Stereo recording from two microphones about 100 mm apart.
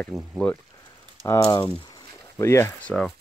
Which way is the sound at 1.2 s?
30° left (ahead or behind).